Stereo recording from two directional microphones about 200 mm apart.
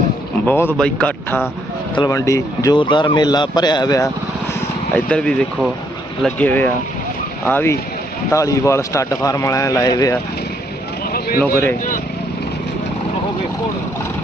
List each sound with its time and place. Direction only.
0.4 s speech: 10° left (ahead or behind)
4.9 s speech: 5° left (ahead or behind)
11.1 s a sound: 50° left (ahead or behind)